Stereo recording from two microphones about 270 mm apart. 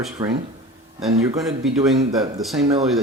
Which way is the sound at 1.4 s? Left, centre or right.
Centre.